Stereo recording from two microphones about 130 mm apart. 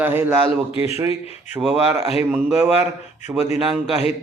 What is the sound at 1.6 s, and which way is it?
Speech, 15° right (ahead or behind).